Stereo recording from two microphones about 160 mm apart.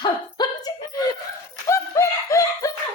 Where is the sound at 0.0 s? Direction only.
25° left (ahead or behind).